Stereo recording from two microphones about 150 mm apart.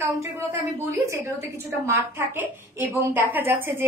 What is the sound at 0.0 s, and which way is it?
A woman's voice, 20° right (ahead or behind).